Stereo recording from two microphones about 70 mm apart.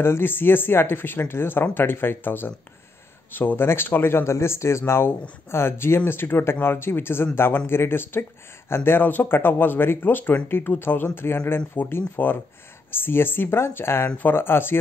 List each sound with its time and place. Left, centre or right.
0.0 s speech: left